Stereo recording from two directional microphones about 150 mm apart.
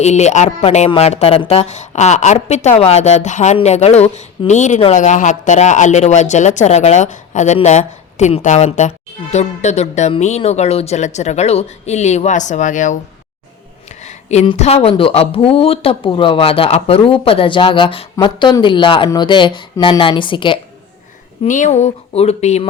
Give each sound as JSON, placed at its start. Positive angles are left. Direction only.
{"t": 0.0, "sound": "a woman's voice", "side_deg": 50}
{"t": 14.0, "sound": "a sound", "side_deg": 50}
{"t": 14.5, "sound": "speech", "side_deg": 45}
{"t": 21.4, "sound": "a woman's voice", "side_deg": 60}